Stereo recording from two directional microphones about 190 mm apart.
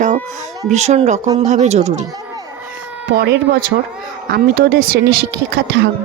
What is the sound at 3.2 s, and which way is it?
Speech, 60° right (ahead or behind).